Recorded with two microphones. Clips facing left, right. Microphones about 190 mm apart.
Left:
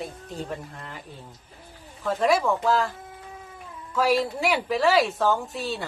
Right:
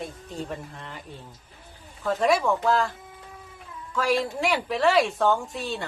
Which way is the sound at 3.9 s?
5° left (ahead or behind).